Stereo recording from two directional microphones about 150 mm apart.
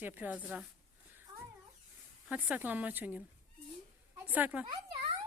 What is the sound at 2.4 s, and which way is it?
A woman's voice, 10° right (ahead or behind).